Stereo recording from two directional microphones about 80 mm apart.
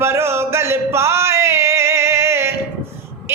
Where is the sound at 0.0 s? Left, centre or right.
Right.